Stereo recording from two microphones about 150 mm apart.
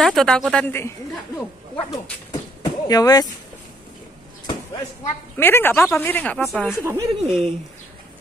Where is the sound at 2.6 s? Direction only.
25° left (ahead or behind).